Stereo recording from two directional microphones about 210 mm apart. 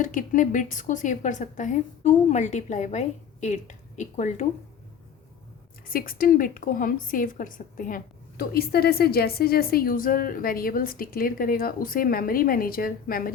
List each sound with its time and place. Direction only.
0.0 s a woman's voice: 40° left (ahead or behind)
5.9 s a woman's voice: 45° left (ahead or behind)